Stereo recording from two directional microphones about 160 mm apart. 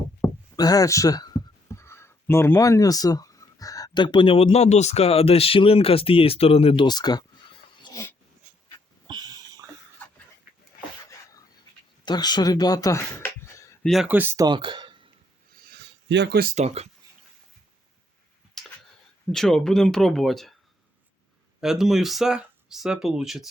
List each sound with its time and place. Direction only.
0.5 s speech: 25° left (ahead or behind)
6.8 s speech: 25° left (ahead or behind)
7.9 s dog: 30° left (ahead or behind)
9.0 s a sound: 25° right (ahead or behind)
12.0 s speech: 25° left (ahead or behind)
13.8 s speech: centre (ahead or behind)
14.1 s speech: 10° right (ahead or behind)
14.4 s a sound: 30° right (ahead or behind)
15.5 s a sound: 75° right (ahead or behind)
16.6 s speech: 40° right (ahead or behind)
18.6 s a sound: centre (ahead or behind)
19.3 s speech: 5° left (ahead or behind)
21.6 s speech: centre (ahead or behind)